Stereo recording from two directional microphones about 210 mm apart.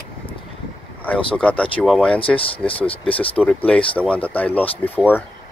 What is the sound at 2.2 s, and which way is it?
Speech, 25° left (ahead or behind).